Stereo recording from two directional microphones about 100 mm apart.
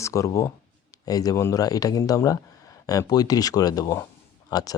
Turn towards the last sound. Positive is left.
turn(degrees=40)  # may be behind; listen again after turning